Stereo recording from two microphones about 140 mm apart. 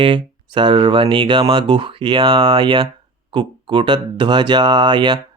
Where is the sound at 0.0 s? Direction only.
40° right (ahead or behind).